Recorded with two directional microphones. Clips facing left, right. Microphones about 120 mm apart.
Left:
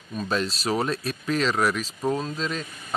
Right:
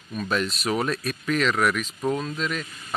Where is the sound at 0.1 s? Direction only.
30° left (ahead or behind).